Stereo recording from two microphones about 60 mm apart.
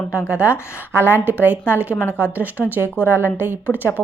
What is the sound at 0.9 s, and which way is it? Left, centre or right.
Speech, right.